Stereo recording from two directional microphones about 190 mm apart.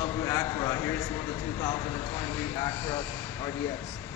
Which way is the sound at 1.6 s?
15° left (ahead or behind).